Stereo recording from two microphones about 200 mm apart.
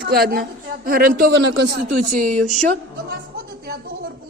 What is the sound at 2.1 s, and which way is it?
Speech, 40° right (ahead or behind).